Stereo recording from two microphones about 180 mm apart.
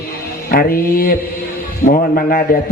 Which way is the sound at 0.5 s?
55° left (ahead or behind).